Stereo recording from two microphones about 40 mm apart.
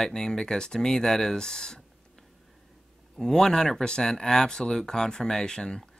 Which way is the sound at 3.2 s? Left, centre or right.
Centre.